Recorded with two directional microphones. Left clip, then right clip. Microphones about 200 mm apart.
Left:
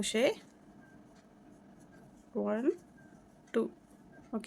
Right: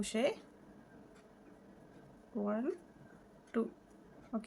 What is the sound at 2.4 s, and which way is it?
A woman's voice, 45° left (ahead or behind).